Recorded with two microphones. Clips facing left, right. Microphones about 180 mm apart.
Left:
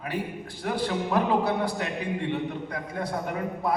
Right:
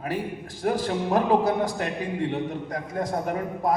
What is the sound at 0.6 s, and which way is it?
A man's voice, 40° right (ahead or behind).